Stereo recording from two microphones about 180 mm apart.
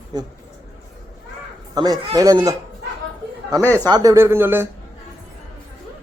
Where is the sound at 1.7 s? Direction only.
20° right (ahead or behind).